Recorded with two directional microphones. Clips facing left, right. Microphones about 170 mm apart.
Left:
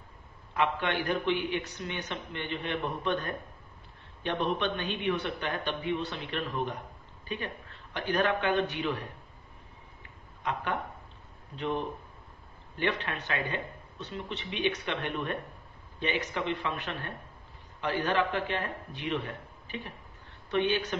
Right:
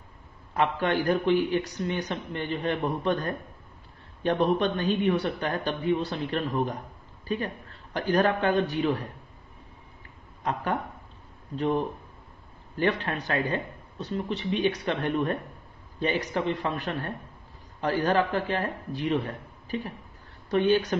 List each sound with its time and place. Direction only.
0.6 s a man's voice: 40° right (ahead or behind)
10.4 s a man's voice: 40° right (ahead or behind)